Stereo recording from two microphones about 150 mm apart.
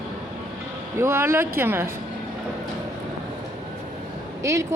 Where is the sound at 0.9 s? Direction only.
15° right (ahead or behind).